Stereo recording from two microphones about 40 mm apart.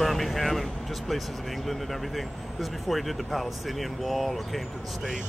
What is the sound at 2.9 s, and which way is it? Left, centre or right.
Speech, centre.